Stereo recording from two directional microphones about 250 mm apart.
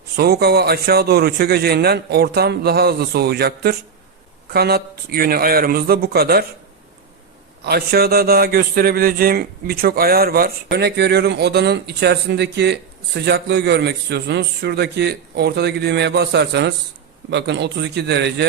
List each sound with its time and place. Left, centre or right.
0.2 s a man's voice: right
7.6 s a man's voice: right